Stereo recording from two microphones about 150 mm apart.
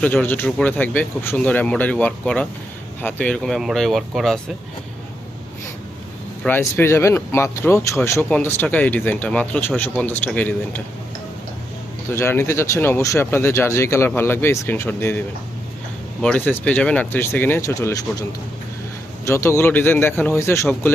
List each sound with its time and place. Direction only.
0.0 s speech: 10° left (ahead or behind)
6.4 s speech: 15° left (ahead or behind)
12.1 s speech: 15° left (ahead or behind)
16.2 s speech: 10° left (ahead or behind)